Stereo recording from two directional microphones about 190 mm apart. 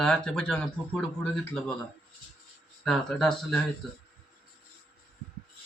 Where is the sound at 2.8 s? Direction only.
Centre (ahead or behind).